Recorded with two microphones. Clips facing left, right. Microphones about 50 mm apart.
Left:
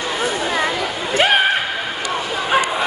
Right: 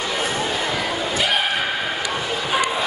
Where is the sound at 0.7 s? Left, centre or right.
Left.